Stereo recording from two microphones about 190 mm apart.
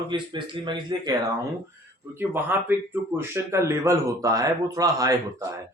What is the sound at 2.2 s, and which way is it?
Speech, 10° right (ahead or behind).